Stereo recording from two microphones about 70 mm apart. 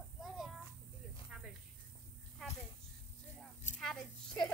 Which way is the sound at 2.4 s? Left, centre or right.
Centre.